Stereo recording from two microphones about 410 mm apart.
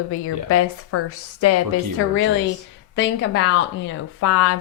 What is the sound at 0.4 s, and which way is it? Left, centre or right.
Speech, left.